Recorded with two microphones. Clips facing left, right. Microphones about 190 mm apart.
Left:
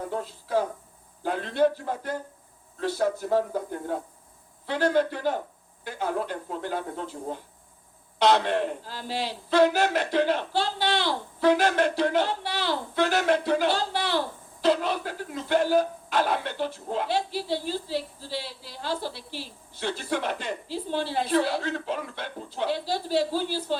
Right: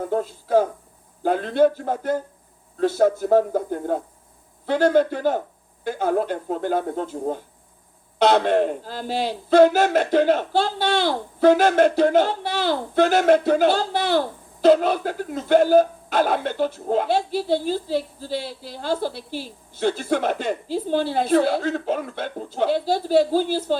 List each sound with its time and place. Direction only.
0.1 s speech: 50° right (ahead or behind)